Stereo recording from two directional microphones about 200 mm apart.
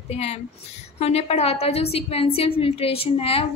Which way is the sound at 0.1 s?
30° left (ahead or behind).